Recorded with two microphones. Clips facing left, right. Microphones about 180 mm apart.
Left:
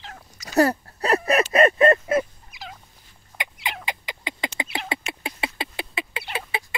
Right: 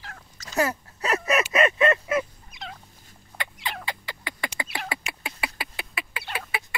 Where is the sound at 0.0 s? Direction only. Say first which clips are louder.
Left 3 dB; 15° left (ahead or behind).